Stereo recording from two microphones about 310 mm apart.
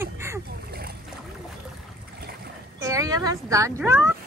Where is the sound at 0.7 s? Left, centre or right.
Right.